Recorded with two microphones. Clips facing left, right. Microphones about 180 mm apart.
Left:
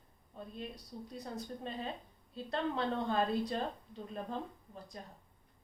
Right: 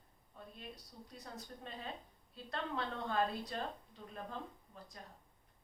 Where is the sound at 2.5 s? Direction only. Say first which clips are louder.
Left 6 dB; 25° left (ahead or behind).